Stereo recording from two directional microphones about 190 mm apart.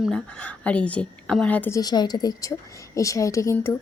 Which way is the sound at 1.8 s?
20° left (ahead or behind).